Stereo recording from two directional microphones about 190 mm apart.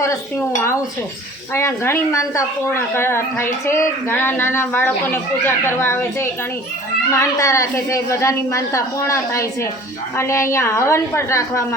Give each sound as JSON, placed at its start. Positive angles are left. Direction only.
{"t": 1.5, "sound": "a woman's voice", "side_deg": 15}